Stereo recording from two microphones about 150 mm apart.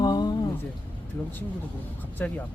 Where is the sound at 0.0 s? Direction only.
30° left (ahead or behind).